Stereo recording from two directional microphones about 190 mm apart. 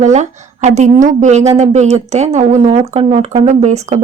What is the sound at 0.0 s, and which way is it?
Speech, 35° right (ahead or behind).